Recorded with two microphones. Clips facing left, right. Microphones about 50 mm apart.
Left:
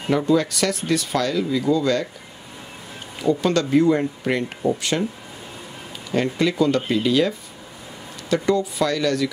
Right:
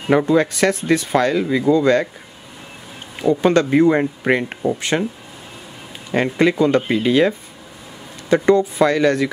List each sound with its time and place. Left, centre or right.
0.1 s speech: right
3.2 s speech: right
6.1 s speech: right